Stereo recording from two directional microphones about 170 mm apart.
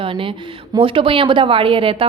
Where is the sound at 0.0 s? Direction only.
30° right (ahead or behind).